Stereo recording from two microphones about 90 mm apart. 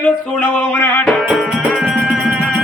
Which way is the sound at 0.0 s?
20° left (ahead or behind).